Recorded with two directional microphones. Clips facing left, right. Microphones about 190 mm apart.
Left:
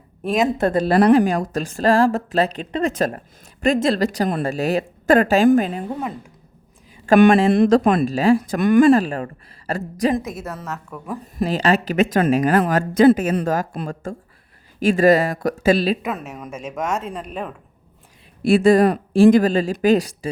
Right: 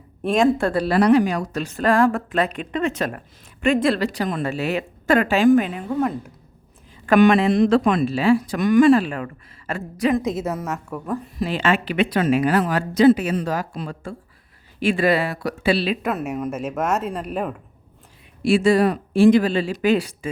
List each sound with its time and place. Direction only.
0.2 s speech: 5° left (ahead or behind)
0.5 s speech: 20° left (ahead or behind)
0.8 s speech: 50° left (ahead or behind)
1.9 s speech: 35° left (ahead or behind)
7.4 s speech: 55° left (ahead or behind)
7.7 s speech: 45° left (ahead or behind)
10.2 s a woman's voice: 20° right (ahead or behind)
11.3 s speech: 40° left (ahead or behind)
16.0 s a woman's voice: 5° right (ahead or behind)
18.4 s speech: 55° left (ahead or behind)